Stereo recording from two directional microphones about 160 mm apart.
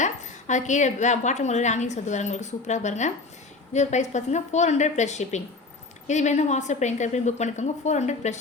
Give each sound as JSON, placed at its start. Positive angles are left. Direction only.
{"t": 0.0, "sound": "a woman's voice", "side_deg": 50}